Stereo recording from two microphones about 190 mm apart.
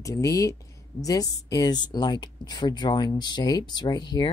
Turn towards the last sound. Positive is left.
turn(degrees=20)  # may be behind; listen again after turning